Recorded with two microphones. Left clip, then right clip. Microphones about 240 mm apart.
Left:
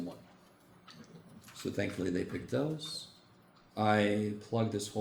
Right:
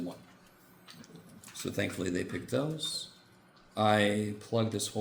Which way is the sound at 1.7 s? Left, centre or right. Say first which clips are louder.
Right 1 dB; right.